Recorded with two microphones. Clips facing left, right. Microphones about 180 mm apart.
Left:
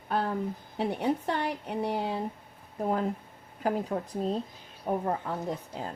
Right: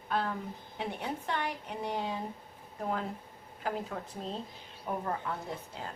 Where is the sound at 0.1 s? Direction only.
40° left (ahead or behind).